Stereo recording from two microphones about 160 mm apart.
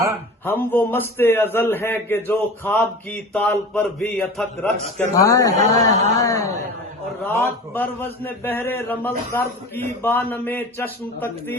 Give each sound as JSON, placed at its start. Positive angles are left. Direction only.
{"t": 0.4, "sound": "a man's voice", "side_deg": 10}
{"t": 5.1, "sound": "a man's voice", "side_deg": 20}